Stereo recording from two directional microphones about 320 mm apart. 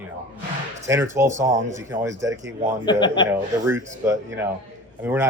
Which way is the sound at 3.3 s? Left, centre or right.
Centre.